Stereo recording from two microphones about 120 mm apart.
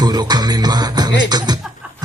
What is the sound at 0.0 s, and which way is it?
Music, 35° right (ahead or behind).